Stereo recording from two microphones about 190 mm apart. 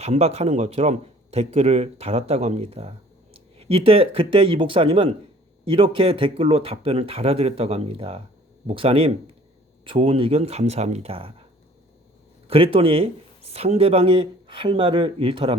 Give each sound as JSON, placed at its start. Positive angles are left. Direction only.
{"t": 0.0, "sound": "a man's voice", "side_deg": -35}
{"t": 12.5, "sound": "speech", "side_deg": -30}